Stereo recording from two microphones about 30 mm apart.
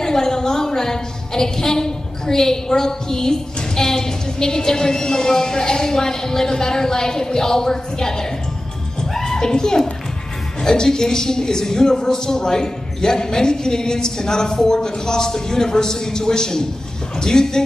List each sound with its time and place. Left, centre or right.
0.0 s a woman's voice: centre
9.1 s music: centre
9.5 s a woman's voice: left